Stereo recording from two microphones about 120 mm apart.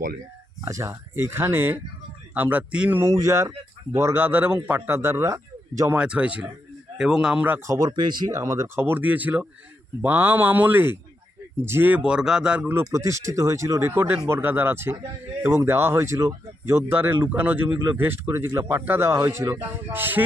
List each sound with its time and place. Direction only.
0.6 s a man's voice: 20° right (ahead or behind)
3.0 s a man's voice: 25° right (ahead or behind)
5.9 s a man's voice: 10° right (ahead or behind)
7.7 s speech: 35° right (ahead or behind)
8.4 s speech: 25° right (ahead or behind)
12.8 s a man's voice: 25° right (ahead or behind)